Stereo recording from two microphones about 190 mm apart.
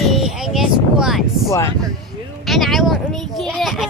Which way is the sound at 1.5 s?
15° left (ahead or behind).